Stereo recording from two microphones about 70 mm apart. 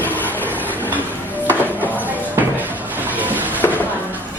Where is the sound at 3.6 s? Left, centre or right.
Left.